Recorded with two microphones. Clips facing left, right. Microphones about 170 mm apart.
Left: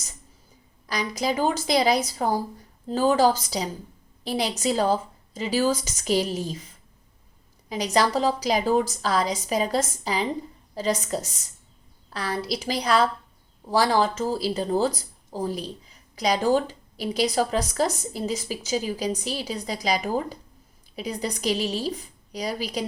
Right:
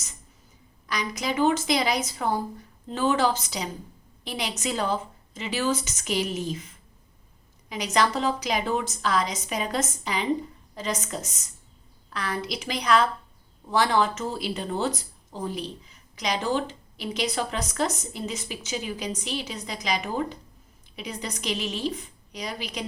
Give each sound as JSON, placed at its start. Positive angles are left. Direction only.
{"t": 0.9, "sound": "speech", "side_deg": 35}